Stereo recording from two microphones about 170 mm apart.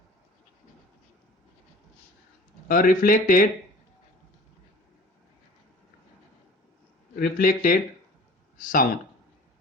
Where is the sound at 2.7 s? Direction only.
55° left (ahead or behind).